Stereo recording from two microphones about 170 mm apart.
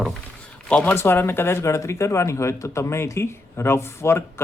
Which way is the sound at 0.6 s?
10° left (ahead or behind).